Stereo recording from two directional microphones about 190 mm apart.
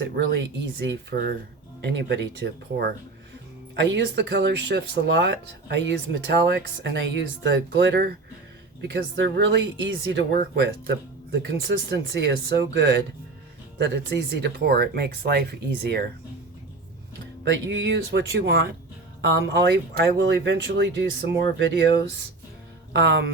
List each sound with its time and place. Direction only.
0.3 s speech: 70° right (ahead or behind)
3.9 s speech: 70° right (ahead or behind)
10.3 s speech: 60° right (ahead or behind)
17.4 s speech: 70° right (ahead or behind)
19.2 s speech: 70° right (ahead or behind)
22.9 s speech: 65° right (ahead or behind)